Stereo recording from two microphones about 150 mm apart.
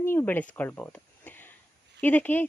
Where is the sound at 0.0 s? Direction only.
15° left (ahead or behind).